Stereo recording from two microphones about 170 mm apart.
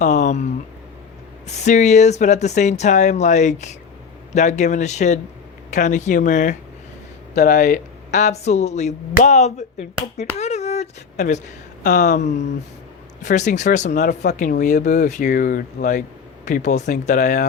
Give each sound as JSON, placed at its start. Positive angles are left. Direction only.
{"t": 0.0, "sound": "speech", "side_deg": 45}
{"t": 1.5, "sound": "speech", "side_deg": 45}
{"t": 7.3, "sound": "speech", "side_deg": 65}
{"t": 8.1, "sound": "speech", "side_deg": 40}
{"t": 10.3, "sound": "a sound", "side_deg": 40}
{"t": 13.2, "sound": "speech", "side_deg": 45}